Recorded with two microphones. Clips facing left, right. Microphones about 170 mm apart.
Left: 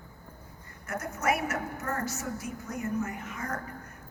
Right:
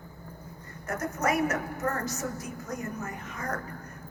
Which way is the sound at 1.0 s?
40° right (ahead or behind).